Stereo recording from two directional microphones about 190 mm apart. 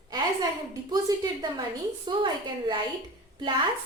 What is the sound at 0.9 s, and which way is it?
A woman's voice, 20° right (ahead or behind).